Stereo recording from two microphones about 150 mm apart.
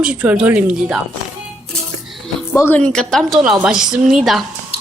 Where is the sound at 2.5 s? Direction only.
15° left (ahead or behind).